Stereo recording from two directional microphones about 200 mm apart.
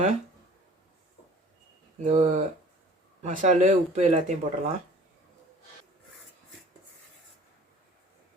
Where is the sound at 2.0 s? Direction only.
35° right (ahead or behind).